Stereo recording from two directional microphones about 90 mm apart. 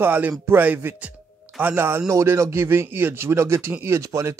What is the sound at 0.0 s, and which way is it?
A man's voice, 20° right (ahead or behind).